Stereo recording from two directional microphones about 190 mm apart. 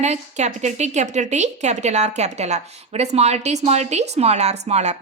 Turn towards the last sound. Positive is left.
turn(degrees=-35)  # may be behind; listen again after turning